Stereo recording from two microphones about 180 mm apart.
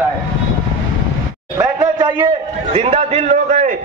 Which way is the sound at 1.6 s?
25° right (ahead or behind).